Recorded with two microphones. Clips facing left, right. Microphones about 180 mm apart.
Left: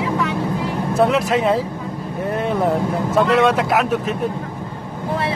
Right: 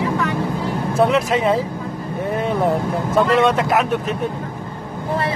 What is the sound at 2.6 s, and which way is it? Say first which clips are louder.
Speech: even; centre (ahead or behind).